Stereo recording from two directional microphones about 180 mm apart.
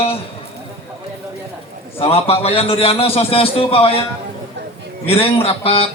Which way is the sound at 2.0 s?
35° left (ahead or behind).